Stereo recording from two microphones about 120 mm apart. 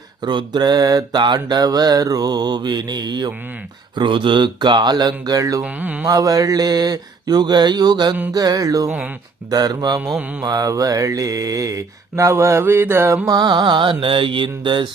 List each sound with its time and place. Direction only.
0.2 s mantra: 40° right (ahead or behind)
5.6 s mantra: 10° right (ahead or behind)
6.1 s mantra: 30° right (ahead or behind)
10.1 s mantra: 10° right (ahead or behind)
10.4 s mantra: 30° right (ahead or behind)
13.3 s mantra: 35° right (ahead or behind)